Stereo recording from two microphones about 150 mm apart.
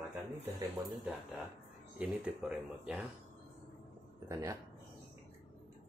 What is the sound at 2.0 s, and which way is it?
Speech, 10° right (ahead or behind).